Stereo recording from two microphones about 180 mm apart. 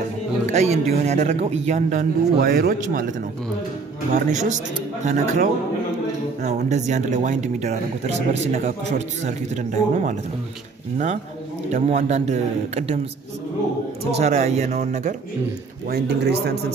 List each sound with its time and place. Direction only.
0.5 s speech: 40° right (ahead or behind)
2.3 s speech: 60° right (ahead or behind)
4.1 s speech: 40° right (ahead or behind)
11.7 s speech: 40° right (ahead or behind)
14.1 s speech: 40° right (ahead or behind)
15.9 s speech: 65° right (ahead or behind)